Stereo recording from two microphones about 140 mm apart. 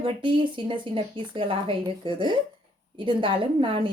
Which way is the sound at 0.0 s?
35° right (ahead or behind).